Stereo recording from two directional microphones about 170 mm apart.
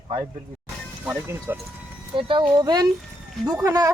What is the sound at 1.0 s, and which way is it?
Speech, 10° right (ahead or behind).